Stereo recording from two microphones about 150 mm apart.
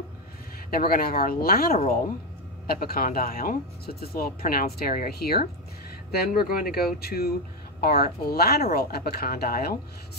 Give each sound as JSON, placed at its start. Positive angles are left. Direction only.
{"t": 0.7, "sound": "speech", "side_deg": 75}